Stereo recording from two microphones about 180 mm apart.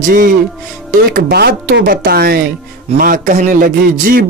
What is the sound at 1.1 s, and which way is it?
A man's voice, 65° right (ahead or behind).